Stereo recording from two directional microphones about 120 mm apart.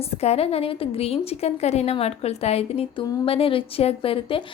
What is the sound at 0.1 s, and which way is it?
A woman's voice, 60° left (ahead or behind).